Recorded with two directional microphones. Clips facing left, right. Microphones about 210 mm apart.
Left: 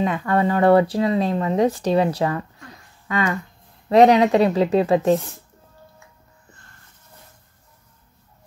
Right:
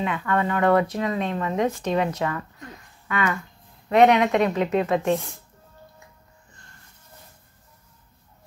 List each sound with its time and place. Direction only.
0.0 s speech: 35° left (ahead or behind)